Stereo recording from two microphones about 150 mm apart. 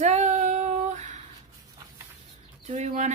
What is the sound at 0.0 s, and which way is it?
Female singing, 50° right (ahead or behind).